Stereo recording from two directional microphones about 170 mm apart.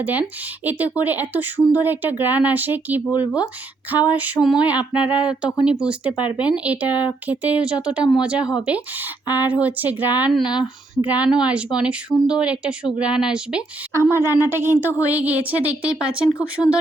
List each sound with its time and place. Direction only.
0.0 s speech: 10° right (ahead or behind)
6.1 s speech: 30° left (ahead or behind)
6.4 s speech: 5° right (ahead or behind)
10.4 s speech: 25° left (ahead or behind)
11.0 s speech: 10° right (ahead or behind)
14.0 s a sound: 15° left (ahead or behind)
14.4 s speech: 15° right (ahead or behind)
14.7 s a sound: 15° left (ahead or behind)
15.6 s speech: 5° right (ahead or behind)
16.6 s a sound: 10° left (ahead or behind)